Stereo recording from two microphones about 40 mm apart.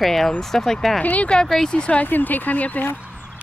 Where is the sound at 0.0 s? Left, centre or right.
Centre.